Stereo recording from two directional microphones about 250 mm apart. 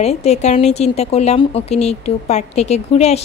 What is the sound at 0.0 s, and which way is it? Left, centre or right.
A woman's voice, left.